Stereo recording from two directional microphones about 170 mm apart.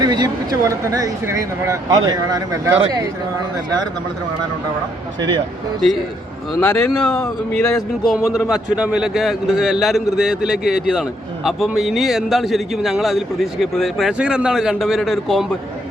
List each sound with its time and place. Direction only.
0.0 s speech: 25° right (ahead or behind)
6.6 s speech: 10° left (ahead or behind)